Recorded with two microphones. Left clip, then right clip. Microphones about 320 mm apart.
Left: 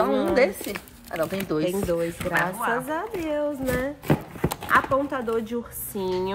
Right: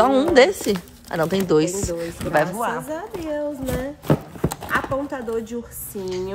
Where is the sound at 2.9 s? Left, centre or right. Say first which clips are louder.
Even; centre.